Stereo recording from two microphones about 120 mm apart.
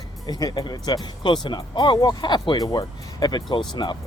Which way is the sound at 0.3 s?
35° left (ahead or behind).